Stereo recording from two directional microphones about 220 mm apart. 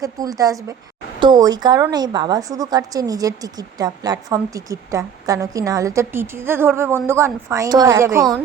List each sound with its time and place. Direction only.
0.0 s a woman's voice: 15° right (ahead or behind)